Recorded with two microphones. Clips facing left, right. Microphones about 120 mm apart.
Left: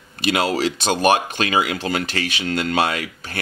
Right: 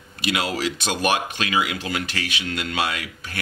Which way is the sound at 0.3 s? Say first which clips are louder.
Left 5 dB; 35° left (ahead or behind).